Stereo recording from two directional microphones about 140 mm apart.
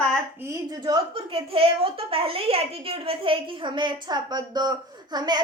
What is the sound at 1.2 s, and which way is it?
A woman's voice, 40° right (ahead or behind).